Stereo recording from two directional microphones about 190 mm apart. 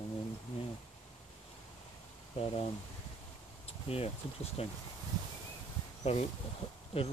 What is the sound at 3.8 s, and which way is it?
Speech, 30° left (ahead or behind).